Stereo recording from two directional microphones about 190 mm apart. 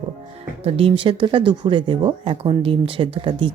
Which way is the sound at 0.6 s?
30° right (ahead or behind).